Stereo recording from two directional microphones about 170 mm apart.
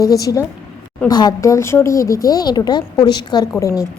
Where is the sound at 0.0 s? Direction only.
20° left (ahead or behind).